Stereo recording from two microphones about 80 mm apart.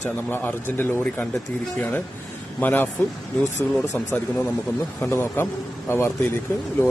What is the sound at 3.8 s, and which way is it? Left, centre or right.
A man's voice, left.